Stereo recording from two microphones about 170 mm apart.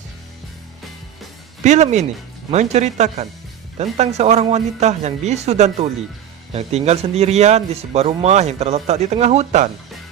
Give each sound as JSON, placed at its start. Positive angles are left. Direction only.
{"t": 1.6, "sound": "speech", "side_deg": -45}